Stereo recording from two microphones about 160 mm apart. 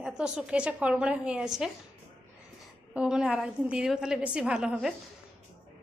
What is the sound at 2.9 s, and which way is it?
A woman's voice, 5° right (ahead or behind).